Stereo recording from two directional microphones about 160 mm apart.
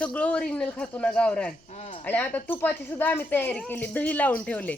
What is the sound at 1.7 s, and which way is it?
Speech, 45° left (ahead or behind).